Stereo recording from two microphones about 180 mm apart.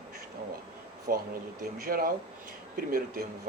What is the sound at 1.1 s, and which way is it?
Speech, 55° right (ahead or behind).